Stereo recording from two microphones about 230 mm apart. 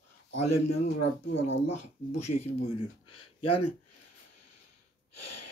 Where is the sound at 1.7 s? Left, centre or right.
Left.